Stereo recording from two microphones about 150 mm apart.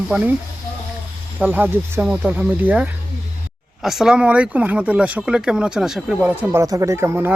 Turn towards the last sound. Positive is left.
turn(degrees=-15)  # may be behind; listen again after turning